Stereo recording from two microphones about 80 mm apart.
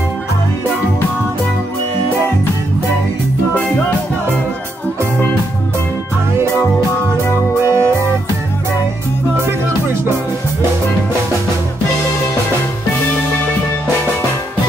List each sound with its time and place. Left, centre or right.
7.6 s music: right